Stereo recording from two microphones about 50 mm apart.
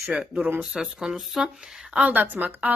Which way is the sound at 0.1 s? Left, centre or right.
Right.